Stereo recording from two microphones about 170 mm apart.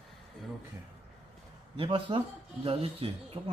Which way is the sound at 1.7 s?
30° right (ahead or behind).